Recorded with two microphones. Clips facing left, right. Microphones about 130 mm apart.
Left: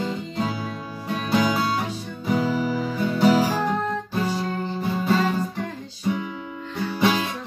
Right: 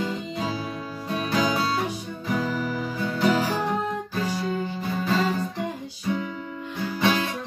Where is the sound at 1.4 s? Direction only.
15° right (ahead or behind).